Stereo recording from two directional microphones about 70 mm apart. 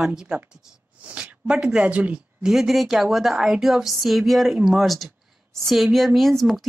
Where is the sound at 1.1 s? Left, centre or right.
Centre.